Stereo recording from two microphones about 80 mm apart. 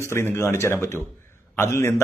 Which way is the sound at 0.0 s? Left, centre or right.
Left.